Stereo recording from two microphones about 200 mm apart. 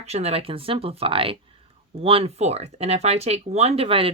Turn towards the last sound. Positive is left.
turn(degrees=-30)  # may be behind; listen again after turning